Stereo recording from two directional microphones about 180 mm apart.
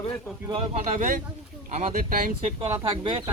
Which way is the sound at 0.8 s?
50° right (ahead or behind).